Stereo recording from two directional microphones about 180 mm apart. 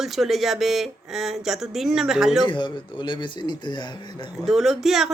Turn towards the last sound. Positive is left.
turn(degrees=0)  # may be behind; listen again after turning